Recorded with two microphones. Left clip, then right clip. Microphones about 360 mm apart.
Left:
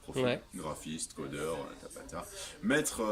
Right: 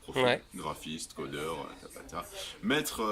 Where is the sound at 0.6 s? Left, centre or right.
Centre.